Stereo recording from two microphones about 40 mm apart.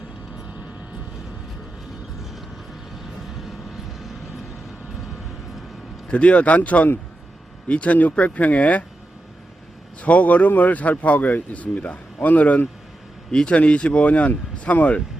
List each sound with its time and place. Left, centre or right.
6.1 s speech: left
7.7 s speech: left
10.0 s speech: left
13.3 s speech: left